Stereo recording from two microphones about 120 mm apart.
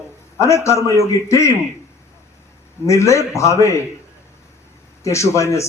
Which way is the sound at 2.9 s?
25° left (ahead or behind).